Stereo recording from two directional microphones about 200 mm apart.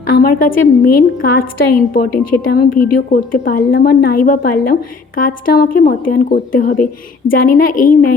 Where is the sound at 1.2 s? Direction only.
45° left (ahead or behind).